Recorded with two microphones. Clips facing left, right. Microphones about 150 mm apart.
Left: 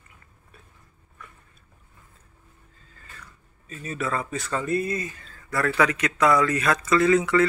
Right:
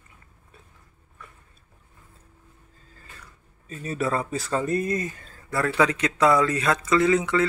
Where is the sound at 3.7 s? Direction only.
35° right (ahead or behind).